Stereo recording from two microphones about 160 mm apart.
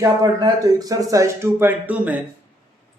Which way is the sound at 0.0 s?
25° right (ahead or behind).